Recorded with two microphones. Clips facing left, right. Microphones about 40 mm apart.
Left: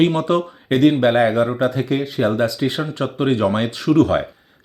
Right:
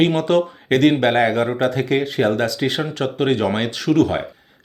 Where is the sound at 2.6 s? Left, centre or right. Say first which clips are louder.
Even; right.